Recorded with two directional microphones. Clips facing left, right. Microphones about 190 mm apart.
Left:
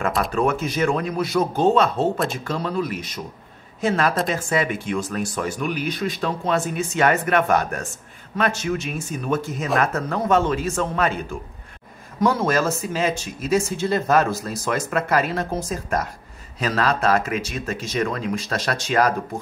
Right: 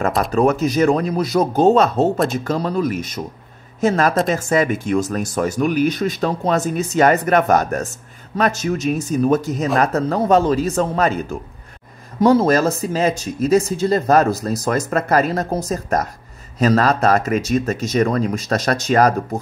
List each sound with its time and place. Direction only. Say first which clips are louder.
0.3 s speech: right 6 dB; 40° right (ahead or behind)
12.2 s speech: right 6 dB; 35° right (ahead or behind)